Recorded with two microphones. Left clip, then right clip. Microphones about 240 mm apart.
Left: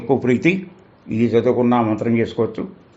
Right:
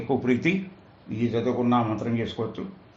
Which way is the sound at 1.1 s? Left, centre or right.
Left.